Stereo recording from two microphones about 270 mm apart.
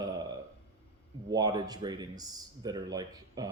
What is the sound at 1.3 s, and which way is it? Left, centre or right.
Speech, centre.